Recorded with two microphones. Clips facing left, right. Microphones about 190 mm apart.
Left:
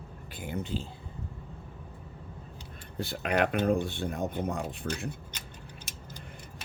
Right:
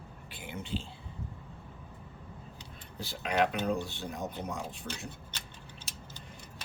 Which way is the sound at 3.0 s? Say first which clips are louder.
Left 2 dB; 55° left (ahead or behind).